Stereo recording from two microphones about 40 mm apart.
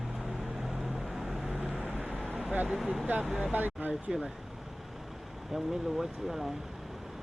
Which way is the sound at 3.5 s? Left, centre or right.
Right.